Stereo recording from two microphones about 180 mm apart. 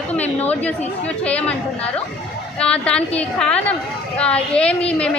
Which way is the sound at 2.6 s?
5° left (ahead or behind).